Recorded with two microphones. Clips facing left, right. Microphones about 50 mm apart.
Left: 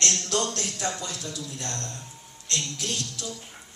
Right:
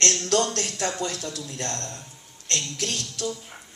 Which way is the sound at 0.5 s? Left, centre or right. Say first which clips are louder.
Right 3 dB; right.